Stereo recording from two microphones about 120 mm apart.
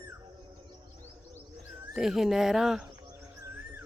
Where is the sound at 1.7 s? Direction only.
Centre (ahead or behind).